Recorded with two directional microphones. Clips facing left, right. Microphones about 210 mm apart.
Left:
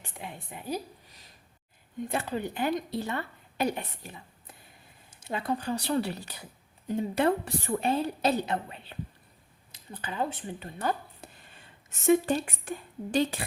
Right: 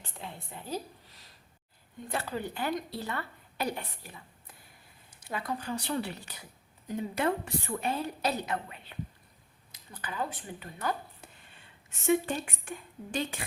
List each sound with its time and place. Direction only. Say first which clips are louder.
0.0 s a woman's voice: left 2 dB; 15° left (ahead or behind); by 13.4 s 35° left (ahead or behind)